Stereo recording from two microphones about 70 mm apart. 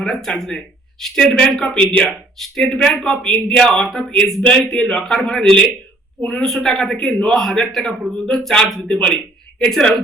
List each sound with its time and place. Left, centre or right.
0.0 s speech: centre
2.0 s speech: centre
4.4 s a man's voice: centre